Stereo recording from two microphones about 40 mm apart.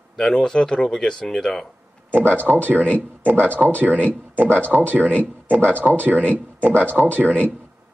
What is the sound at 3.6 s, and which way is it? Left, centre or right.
Speech, right.